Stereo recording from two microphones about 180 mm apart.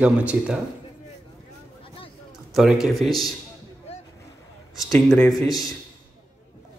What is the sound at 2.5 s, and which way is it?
Speech, centre (ahead or behind).